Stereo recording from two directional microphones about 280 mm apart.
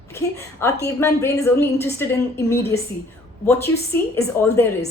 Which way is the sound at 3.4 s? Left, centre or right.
Centre.